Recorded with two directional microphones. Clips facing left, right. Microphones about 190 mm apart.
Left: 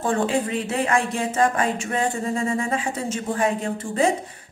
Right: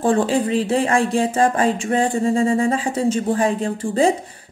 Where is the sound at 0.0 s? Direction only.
30° right (ahead or behind).